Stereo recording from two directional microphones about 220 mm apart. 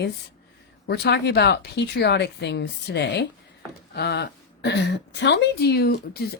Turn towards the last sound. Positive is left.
turn(degrees=45)  # may be behind; listen again after turning